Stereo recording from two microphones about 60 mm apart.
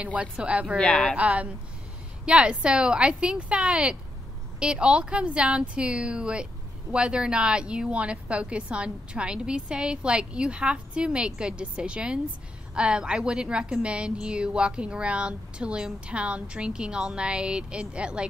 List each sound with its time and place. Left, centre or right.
0.0 s a woman's voice: right
0.7 s speech: centre
1.1 s a woman's voice: right